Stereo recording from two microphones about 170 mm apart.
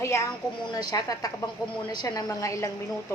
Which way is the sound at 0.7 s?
20° left (ahead or behind).